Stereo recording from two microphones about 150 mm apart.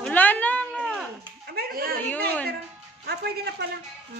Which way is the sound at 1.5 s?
85° right.